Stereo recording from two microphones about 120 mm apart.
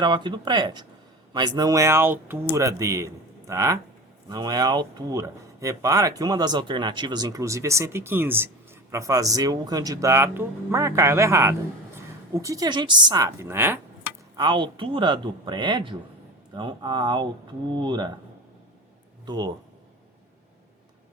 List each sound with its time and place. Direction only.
0.0 s speech: 40° right (ahead or behind)
13.2 s speech: 20° right (ahead or behind)
14.3 s speech: 40° right (ahead or behind)
19.2 s speech: 35° right (ahead or behind)